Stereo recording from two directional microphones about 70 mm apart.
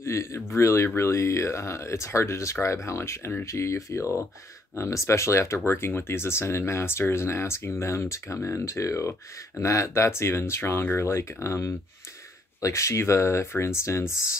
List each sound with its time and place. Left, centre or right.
0.0 s speech: left